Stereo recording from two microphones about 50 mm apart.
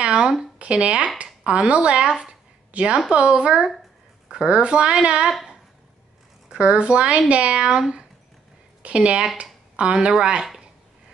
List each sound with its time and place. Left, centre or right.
0.0 s a sound: centre
0.6 s a woman's voice: right
6.5 s speech: right